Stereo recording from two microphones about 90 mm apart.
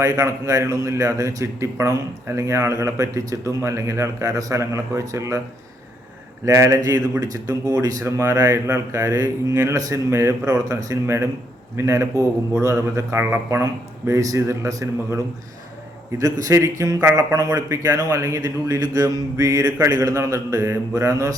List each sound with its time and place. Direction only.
0.0 s a man's voice: 35° right (ahead or behind)
6.4 s a man's voice: 35° right (ahead or behind)